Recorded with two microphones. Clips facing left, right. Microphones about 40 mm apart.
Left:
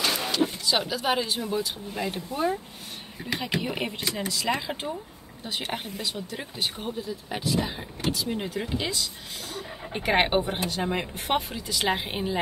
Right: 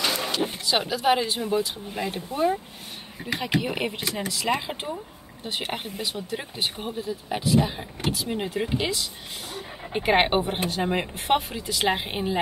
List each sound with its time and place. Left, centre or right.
0.2 s music: centre
0.9 s speech: centre